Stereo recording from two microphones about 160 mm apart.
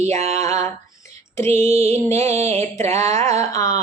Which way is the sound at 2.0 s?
15° left (ahead or behind).